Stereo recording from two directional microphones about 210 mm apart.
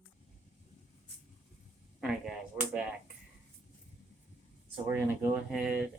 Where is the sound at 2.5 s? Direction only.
5° right (ahead or behind).